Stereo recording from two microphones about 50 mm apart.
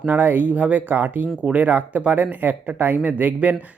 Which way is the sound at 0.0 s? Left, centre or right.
Right.